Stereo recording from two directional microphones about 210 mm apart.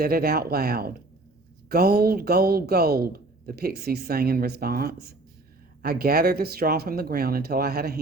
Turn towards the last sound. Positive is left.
turn(degrees=-45)  # may be behind; listen again after turning